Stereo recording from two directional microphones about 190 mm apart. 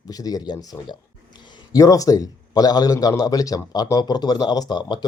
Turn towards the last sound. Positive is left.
turn(degrees=20)  # may be behind; listen again after turning